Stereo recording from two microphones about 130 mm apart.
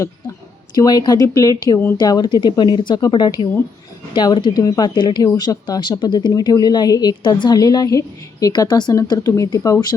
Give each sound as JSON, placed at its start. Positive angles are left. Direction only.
{"t": 0.8, "sound": "a woman's voice", "side_deg": 30}